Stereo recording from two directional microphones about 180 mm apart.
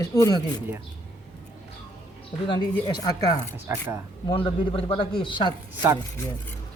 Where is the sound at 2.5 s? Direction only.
25° left (ahead or behind).